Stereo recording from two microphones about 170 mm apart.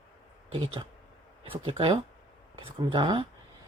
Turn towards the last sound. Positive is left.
turn(degrees=-30)  # may be behind; listen again after turning